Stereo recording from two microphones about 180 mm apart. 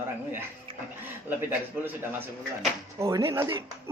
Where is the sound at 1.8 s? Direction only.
10° right (ahead or behind).